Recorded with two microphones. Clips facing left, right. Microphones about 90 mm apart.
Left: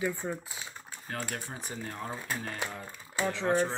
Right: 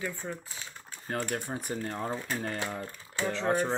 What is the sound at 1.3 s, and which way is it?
Speech, 55° right (ahead or behind).